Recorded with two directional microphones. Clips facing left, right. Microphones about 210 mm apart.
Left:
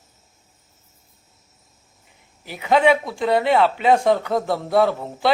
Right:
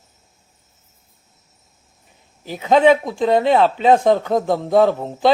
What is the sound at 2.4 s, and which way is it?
A man's voice, 20° right (ahead or behind).